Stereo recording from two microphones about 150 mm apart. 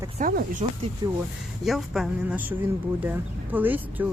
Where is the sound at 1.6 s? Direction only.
Centre (ahead or behind).